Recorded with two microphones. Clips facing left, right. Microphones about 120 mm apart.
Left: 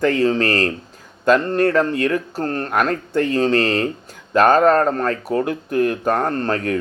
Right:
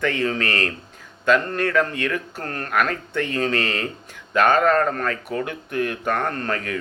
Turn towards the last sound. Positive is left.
turn(degrees=40)  # may be behind; listen again after turning